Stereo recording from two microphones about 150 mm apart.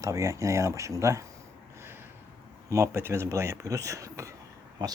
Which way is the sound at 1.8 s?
15° right (ahead or behind).